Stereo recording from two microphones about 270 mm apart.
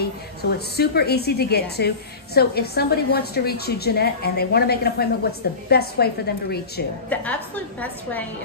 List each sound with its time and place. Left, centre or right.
0.0 s a woman's voice: left
7.1 s a woman's voice: centre